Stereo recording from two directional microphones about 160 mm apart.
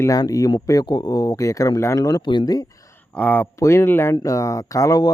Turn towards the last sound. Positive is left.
turn(degrees=25)  # may be behind; listen again after turning